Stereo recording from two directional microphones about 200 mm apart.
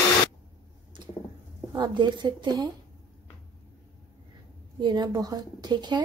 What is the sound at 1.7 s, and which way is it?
Speech, 20° right (ahead or behind).